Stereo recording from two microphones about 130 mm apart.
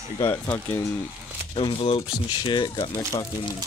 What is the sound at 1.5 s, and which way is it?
Speech, 40° left (ahead or behind).